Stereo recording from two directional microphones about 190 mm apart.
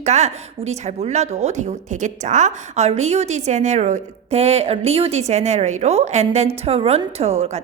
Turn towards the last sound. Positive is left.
turn(degrees=-35)  # may be behind; listen again after turning